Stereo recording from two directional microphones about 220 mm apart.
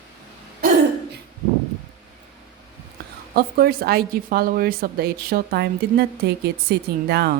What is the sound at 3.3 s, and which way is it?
A woman's voice, 45° right (ahead or behind).